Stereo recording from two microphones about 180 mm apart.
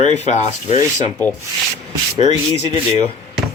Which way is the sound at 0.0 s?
40° left (ahead or behind).